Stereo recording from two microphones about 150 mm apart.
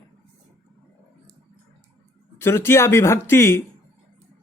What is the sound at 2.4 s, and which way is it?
Speech, 15° left (ahead or behind).